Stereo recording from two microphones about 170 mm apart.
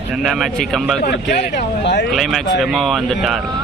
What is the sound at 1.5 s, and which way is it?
Speech, 90° left.